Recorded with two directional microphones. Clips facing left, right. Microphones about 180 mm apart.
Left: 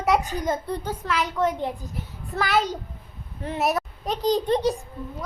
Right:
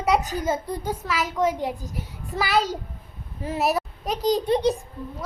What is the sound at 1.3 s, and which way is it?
A child's voice, 10° right (ahead or behind).